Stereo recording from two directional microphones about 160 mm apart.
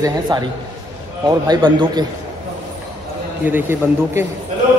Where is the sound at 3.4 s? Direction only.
10° right (ahead or behind).